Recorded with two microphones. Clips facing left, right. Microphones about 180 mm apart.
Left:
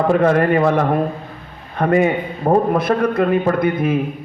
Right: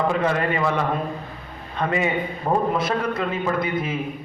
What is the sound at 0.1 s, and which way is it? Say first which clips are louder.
A man's voice: left 8 dB; 50° left (ahead or behind).